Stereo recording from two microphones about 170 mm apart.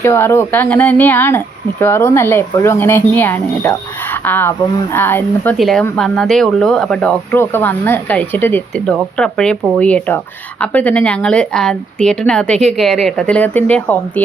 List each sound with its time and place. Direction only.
0.0 s speech: 15° left (ahead or behind)
5.5 s speech: centre (ahead or behind)